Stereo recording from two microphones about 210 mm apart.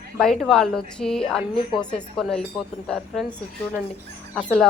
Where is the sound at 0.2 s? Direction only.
Centre (ahead or behind).